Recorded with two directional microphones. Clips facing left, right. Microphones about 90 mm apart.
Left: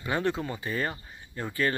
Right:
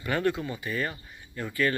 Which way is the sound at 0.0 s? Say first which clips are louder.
Right 1 dB; 20° left (ahead or behind).